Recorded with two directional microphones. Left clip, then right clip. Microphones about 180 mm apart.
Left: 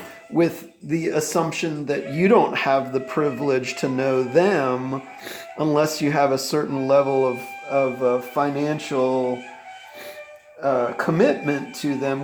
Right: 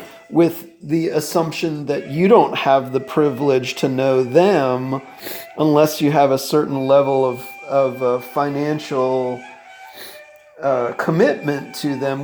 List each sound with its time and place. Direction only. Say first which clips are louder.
0.4 s speech: right 4 dB; 45° right (ahead or behind)
7.1 s speech: right 3 dB; 60° right (ahead or behind)
7.7 s speech: right 3 dB; 35° right (ahead or behind)
10.6 s speech: right 3 dB; 40° right (ahead or behind)